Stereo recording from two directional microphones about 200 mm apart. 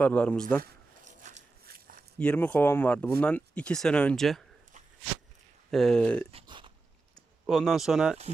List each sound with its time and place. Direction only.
0.0 s speech: 5° left (ahead or behind)
0.6 s a sound: 40° right (ahead or behind)
2.1 s speech: 5° left (ahead or behind)
5.7 s speech: 5° left (ahead or behind)
6.3 s a sound: 25° right (ahead or behind)
7.4 s speech: centre (ahead or behind)